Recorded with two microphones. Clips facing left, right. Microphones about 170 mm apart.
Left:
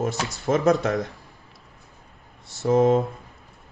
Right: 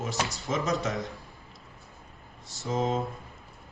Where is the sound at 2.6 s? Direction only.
65° left (ahead or behind).